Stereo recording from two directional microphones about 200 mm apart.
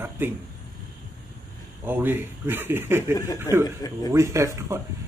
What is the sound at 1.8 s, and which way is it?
A man's voice, 10° right (ahead or behind).